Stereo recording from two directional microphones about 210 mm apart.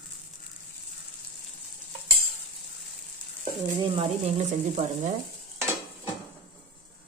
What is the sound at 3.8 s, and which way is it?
Speech, 25° right (ahead or behind).